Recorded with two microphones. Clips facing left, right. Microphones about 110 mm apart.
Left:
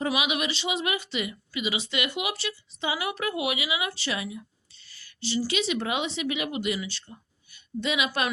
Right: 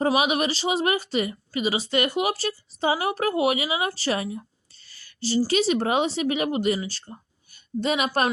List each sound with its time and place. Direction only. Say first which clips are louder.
0.0 s a woman's voice: right 6 dB; 40° right (ahead or behind)